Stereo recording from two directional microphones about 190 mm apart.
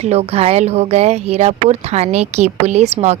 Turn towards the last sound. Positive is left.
turn(degrees=-35)  # may be behind; listen again after turning